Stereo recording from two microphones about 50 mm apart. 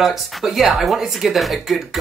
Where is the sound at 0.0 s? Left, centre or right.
Centre.